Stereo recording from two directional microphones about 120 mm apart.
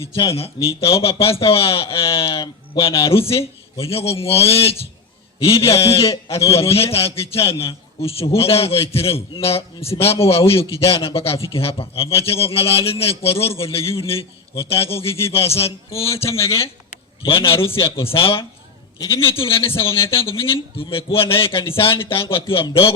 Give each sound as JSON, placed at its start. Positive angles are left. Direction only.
{"t": 0.0, "sound": "a man's voice", "side_deg": 50}
{"t": 16.4, "sound": "a man's voice", "side_deg": 25}
{"t": 17.2, "sound": "a man's voice", "side_deg": 50}
{"t": 18.9, "sound": "a man's voice", "side_deg": 25}
{"t": 19.3, "sound": "a man's voice", "side_deg": 50}